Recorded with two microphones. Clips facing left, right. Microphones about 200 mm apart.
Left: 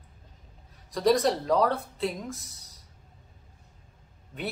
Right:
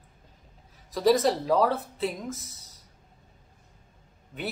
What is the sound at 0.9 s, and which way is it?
Speech, centre (ahead or behind).